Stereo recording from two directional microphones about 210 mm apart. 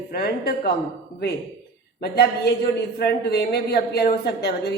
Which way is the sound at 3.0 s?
50° left (ahead or behind).